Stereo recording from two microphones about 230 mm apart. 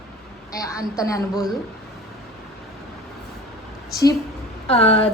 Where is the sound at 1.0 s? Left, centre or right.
Centre.